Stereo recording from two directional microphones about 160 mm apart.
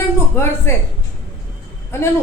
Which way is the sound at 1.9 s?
15° left (ahead or behind).